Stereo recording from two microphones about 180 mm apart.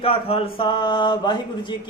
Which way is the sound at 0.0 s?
30° left (ahead or behind).